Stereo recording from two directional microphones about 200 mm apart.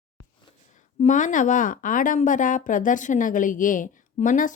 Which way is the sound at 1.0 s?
40° left (ahead or behind).